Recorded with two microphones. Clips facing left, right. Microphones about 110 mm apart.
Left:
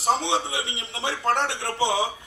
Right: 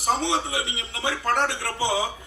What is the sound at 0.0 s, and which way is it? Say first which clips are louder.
A man's voice: left 1 dB; 25° left (ahead or behind).